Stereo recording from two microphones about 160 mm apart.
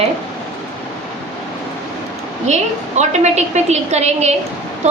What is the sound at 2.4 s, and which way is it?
A woman's voice, 45° right (ahead or behind).